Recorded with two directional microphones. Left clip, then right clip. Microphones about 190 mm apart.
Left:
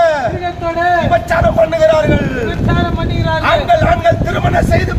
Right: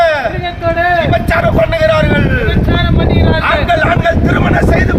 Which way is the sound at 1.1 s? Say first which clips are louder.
Even; 25° right (ahead or behind).